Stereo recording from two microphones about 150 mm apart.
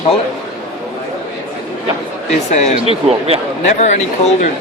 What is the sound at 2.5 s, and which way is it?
Speech, 50° left (ahead or behind).